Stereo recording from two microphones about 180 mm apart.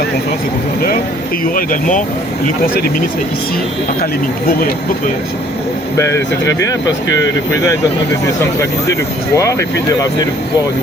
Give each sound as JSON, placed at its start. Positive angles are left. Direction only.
{"t": 1.5, "sound": "speech", "side_deg": 45}
{"t": 6.0, "sound": "speech", "side_deg": 15}
{"t": 8.9, "sound": "speech", "side_deg": 15}